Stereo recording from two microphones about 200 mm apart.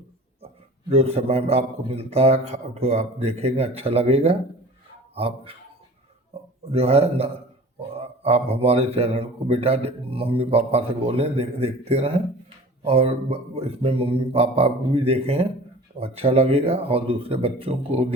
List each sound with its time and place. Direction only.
0.9 s speech: 30° right (ahead or behind)
6.7 s speech: 30° right (ahead or behind)